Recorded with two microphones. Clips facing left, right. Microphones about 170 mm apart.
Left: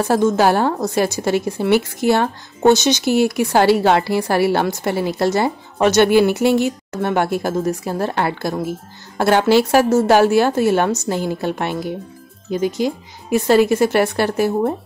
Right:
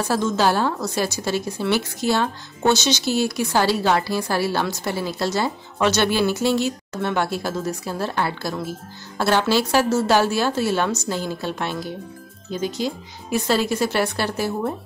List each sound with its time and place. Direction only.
0.1 s speech: 55° left (ahead or behind)